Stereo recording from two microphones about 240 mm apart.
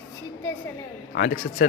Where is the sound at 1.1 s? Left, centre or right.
Left.